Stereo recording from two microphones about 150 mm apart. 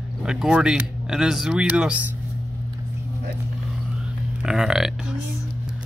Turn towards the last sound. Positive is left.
turn(degrees=-5)  # may be behind; listen again after turning